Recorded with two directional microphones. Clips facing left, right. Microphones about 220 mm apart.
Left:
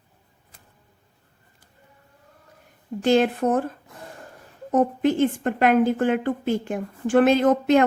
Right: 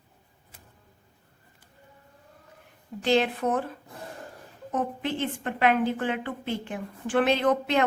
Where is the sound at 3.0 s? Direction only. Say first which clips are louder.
Left 5 dB; 45° left (ahead or behind).